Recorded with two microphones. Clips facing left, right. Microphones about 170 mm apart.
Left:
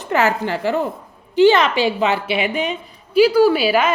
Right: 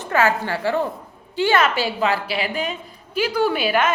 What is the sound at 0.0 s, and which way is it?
A woman's voice, 20° left (ahead or behind).